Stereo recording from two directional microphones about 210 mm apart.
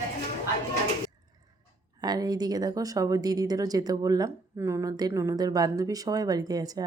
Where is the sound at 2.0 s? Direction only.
20° right (ahead or behind).